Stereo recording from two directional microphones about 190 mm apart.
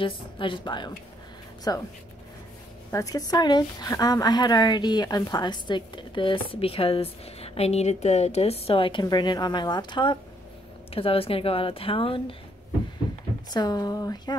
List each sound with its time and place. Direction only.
0.0 s a woman's voice: 25° left (ahead or behind)
2.9 s a woman's voice: 15° left (ahead or behind)
13.5 s a woman's voice: 20° left (ahead or behind)